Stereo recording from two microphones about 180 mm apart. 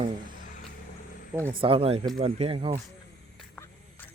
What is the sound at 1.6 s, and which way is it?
Speech, 30° right (ahead or behind).